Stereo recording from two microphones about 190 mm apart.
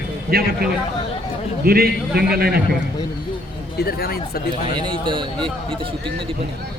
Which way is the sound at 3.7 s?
55° left (ahead or behind).